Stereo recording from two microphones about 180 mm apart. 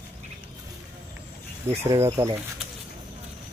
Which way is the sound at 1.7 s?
20° right (ahead or behind).